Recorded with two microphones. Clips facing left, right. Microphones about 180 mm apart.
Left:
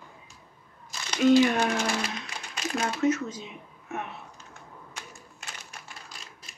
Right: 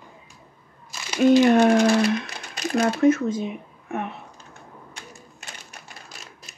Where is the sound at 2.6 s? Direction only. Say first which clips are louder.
Right 8 dB; 45° right (ahead or behind).